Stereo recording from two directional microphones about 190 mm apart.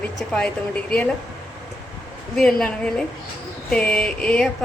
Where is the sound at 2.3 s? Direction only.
5° left (ahead or behind).